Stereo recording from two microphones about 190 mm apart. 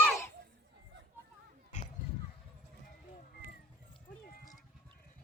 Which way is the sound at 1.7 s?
40° left (ahead or behind).